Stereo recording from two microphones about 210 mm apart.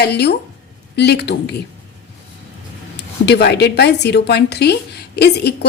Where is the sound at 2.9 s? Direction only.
50° left (ahead or behind).